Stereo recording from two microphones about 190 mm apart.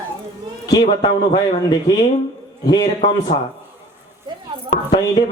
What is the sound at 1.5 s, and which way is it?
Speech, 20° left (ahead or behind).